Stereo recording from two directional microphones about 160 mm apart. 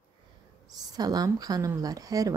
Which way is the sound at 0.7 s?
25° right (ahead or behind).